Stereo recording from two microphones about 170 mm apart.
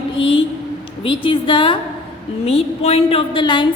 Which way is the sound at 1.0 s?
30° left (ahead or behind).